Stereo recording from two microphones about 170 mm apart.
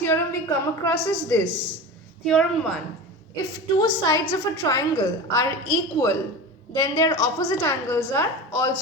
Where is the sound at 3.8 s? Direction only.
20° left (ahead or behind).